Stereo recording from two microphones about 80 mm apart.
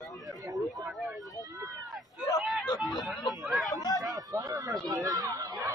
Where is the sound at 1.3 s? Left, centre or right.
Right.